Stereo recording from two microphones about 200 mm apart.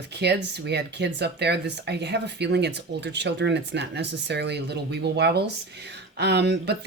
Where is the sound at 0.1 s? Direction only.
60° right (ahead or behind).